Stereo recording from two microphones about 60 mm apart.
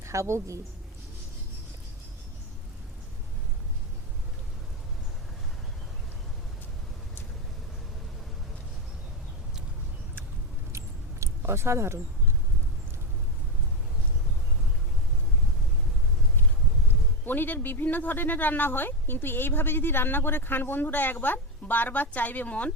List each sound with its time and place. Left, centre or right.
0.0 s a woman's voice: right
10.7 s a sound: right
17.2 s speech: left